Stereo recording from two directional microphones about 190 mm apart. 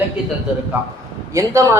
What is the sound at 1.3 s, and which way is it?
Speech, 15° right (ahead or behind).